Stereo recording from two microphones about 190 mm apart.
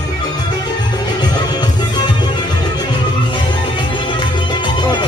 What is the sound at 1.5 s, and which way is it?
Music, 20° left (ahead or behind).